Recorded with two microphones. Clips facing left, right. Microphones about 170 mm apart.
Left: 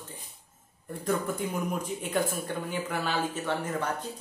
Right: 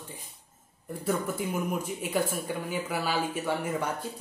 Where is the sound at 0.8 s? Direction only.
5° right (ahead or behind).